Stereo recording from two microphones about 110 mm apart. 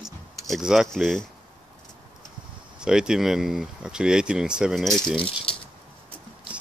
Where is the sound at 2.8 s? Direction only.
5° right (ahead or behind).